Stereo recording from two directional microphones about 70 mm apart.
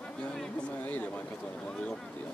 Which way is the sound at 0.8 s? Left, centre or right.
Left.